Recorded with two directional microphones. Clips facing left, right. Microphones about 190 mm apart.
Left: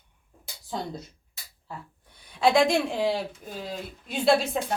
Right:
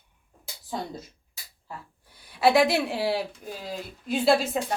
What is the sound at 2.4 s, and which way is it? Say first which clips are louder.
A woman's voice: even; 5° right (ahead or behind).